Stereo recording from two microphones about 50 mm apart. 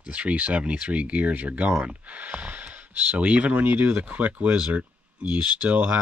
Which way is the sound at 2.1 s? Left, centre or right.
Right.